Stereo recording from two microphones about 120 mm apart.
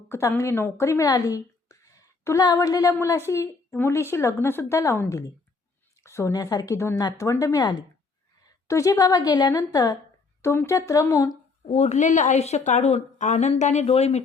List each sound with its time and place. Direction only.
0.1 s a woman's voice: 25° left (ahead or behind)
8.6 s a woman's voice: 25° left (ahead or behind)
11.6 s a woman's voice: 65° left (ahead or behind)